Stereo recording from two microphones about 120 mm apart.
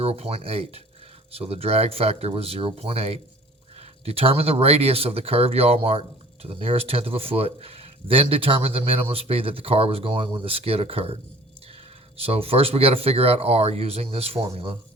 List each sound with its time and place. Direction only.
0.0 s speech: 55° right (ahead or behind)
12.2 s speech: 55° right (ahead or behind)